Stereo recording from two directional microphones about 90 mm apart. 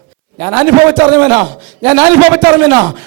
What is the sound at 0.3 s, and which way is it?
A man's voice, 25° right (ahead or behind).